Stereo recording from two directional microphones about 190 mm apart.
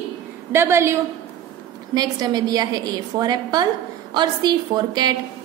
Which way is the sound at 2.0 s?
20° right (ahead or behind).